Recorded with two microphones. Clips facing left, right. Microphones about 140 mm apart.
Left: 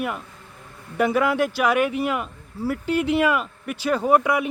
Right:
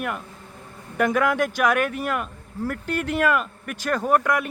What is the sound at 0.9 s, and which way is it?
Speech, 5° left (ahead or behind).